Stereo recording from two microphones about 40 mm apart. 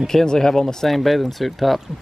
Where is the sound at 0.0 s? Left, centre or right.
Centre.